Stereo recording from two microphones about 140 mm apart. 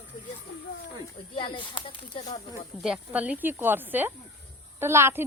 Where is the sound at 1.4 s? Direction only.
35° left (ahead or behind).